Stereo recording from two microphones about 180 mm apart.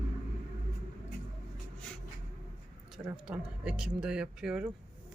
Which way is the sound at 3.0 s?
5° right (ahead or behind).